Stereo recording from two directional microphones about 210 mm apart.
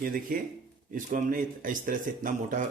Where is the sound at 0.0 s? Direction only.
40° right (ahead or behind).